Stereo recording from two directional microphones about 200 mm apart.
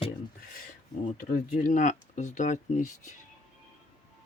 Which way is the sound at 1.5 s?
40° left (ahead or behind).